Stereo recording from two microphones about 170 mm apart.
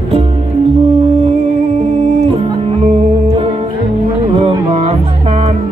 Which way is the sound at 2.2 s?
30° right (ahead or behind).